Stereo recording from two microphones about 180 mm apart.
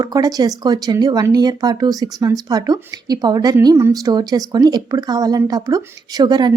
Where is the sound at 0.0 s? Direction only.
20° right (ahead or behind).